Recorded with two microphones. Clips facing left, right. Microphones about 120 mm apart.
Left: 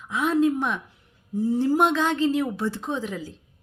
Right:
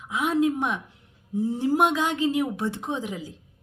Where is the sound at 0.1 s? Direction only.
15° right (ahead or behind).